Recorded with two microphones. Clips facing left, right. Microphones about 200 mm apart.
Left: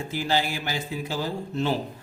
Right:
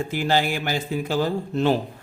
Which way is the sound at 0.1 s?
55° right (ahead or behind).